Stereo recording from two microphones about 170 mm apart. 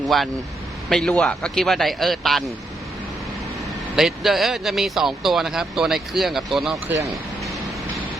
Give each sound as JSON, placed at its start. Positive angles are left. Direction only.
{"t": 0.0, "sound": "speech", "side_deg": 0}
{"t": 3.9, "sound": "speech", "side_deg": 0}
{"t": 6.9, "sound": "speech", "side_deg": -20}